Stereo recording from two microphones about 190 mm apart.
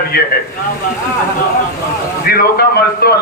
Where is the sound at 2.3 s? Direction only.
55° left (ahead or behind).